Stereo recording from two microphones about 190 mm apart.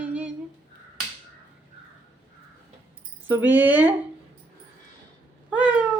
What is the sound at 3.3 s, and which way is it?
Speech, 10° right (ahead or behind).